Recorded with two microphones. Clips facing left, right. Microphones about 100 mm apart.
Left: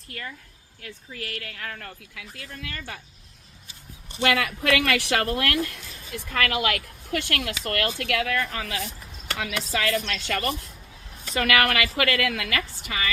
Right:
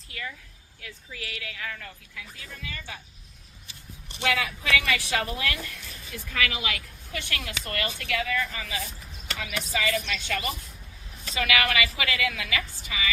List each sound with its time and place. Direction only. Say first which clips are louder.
0.8 s speech: left 3 dB; 50° left (ahead or behind)
2.1 s a woman's voice: left 2 dB; 70° left (ahead or behind)
4.2 s speech: left 4 dB; 70° left (ahead or behind)
6.3 s a woman's voice: left 5 dB; 55° left (ahead or behind)
9.2 s a woman's voice: left 4 dB; 60° left (ahead or behind)
11.3 s a woman's voice: left 3 dB; 50° left (ahead or behind)